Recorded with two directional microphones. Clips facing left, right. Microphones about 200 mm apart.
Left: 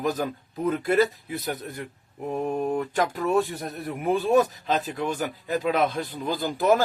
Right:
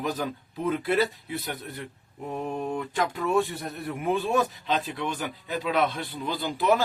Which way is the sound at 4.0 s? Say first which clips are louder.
Left 4 dB; 40° left (ahead or behind).